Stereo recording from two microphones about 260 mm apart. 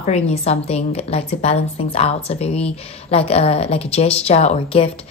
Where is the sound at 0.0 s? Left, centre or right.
Left.